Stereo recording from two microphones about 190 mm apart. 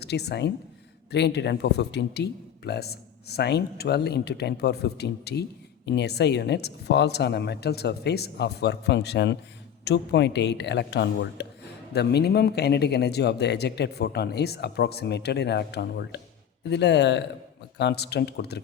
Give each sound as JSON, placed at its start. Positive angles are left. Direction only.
{"t": 0.0, "sound": "speech", "side_deg": 60}